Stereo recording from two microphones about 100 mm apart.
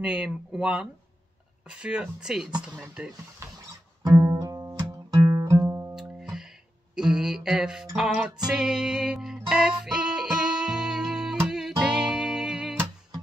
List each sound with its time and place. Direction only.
0.0 s speech: 10° right (ahead or behind)
3.4 s a sound: 30° right (ahead or behind)
4.0 s guitar: 45° right (ahead or behind)
5.1 s music: 35° right (ahead or behind)
5.9 s music: 5° right (ahead or behind)